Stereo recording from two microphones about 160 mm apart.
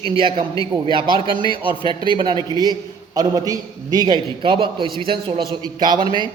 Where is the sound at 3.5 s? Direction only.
25° right (ahead or behind).